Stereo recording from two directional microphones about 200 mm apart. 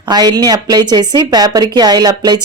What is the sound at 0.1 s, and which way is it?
Speech, 20° right (ahead or behind).